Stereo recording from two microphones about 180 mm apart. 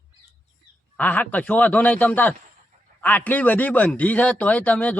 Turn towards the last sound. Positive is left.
turn(degrees=5)  # may be behind; listen again after turning